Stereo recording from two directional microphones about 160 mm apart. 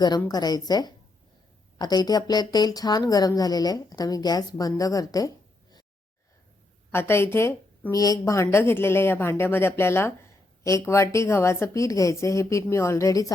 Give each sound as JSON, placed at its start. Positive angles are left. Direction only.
{"t": 0.3, "sound": "speech", "side_deg": 25}
{"t": 6.9, "sound": "speech", "side_deg": 15}